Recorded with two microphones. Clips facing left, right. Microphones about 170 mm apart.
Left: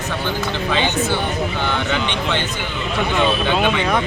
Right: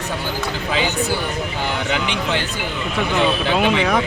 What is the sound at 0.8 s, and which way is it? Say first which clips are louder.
Speech: left 1 dB; 35° right (ahead or behind).